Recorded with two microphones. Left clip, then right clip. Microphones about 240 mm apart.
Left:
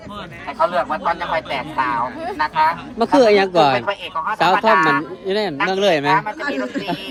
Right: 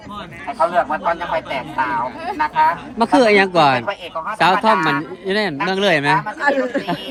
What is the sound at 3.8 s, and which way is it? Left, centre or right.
Speech, centre.